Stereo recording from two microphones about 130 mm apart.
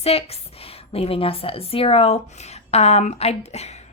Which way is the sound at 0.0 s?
50° left (ahead or behind).